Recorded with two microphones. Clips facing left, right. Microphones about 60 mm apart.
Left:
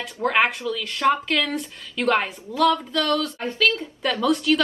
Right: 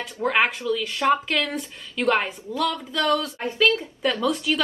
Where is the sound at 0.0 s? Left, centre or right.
Centre.